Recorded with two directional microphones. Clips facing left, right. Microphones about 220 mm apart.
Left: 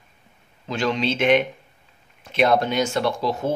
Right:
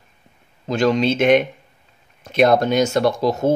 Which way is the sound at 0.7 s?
45° right (ahead or behind).